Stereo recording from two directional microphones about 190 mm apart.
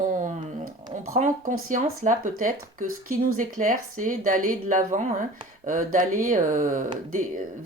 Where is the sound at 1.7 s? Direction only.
45° right (ahead or behind).